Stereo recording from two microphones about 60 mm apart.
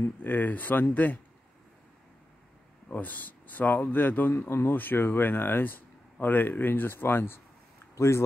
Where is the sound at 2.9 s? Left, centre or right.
Left.